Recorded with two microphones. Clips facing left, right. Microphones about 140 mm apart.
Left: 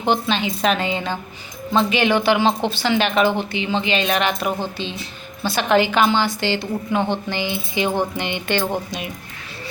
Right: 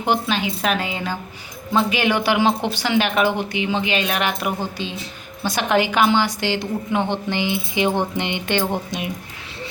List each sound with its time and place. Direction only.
0.0 s a woman's voice: 10° right (ahead or behind)